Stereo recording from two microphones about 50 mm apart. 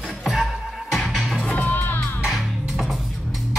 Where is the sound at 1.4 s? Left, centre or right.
Left.